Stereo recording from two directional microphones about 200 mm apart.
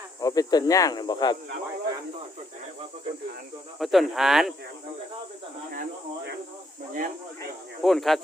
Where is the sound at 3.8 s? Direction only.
Centre (ahead or behind).